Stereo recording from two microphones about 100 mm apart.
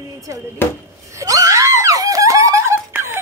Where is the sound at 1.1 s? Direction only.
35° right (ahead or behind).